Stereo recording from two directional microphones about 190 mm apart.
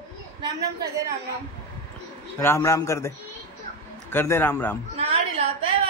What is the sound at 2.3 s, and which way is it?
Speech, 15° left (ahead or behind).